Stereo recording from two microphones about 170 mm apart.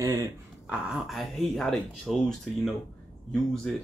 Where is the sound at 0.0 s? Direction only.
20° right (ahead or behind).